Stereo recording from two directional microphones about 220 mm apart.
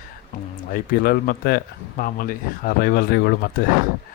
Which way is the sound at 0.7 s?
45° left (ahead or behind).